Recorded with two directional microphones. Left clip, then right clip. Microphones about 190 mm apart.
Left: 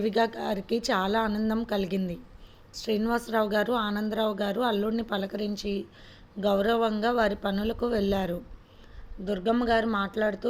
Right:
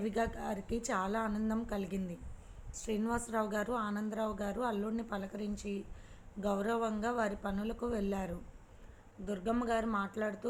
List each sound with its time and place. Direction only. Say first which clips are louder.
0.0 s a woman's voice: left 10 dB; 50° left (ahead or behind)